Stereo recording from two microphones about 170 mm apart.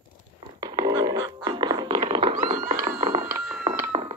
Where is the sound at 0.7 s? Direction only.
25° right (ahead or behind).